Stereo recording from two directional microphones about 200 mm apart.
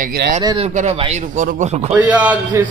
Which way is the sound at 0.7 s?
35° right (ahead or behind).